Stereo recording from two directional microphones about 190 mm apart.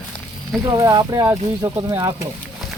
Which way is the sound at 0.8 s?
20° right (ahead or behind).